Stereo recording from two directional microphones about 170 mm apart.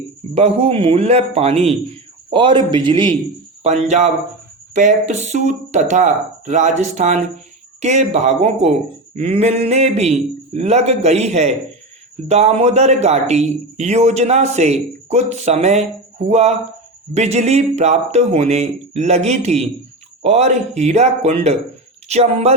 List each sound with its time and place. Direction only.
0.3 s a man's voice: 35° right (ahead or behind)
3.6 s a man's voice: 40° right (ahead or behind)